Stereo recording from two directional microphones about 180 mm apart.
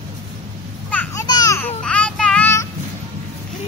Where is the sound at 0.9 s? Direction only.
10° left (ahead or behind).